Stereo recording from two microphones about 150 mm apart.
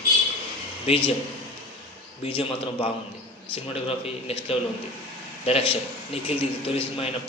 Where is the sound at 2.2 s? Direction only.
35° left (ahead or behind).